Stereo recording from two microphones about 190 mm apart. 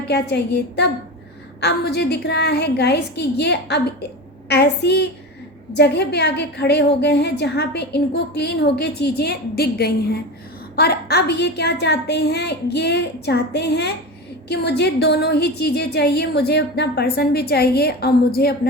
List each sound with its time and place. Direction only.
0.1 s a woman's voice: 60° left (ahead or behind)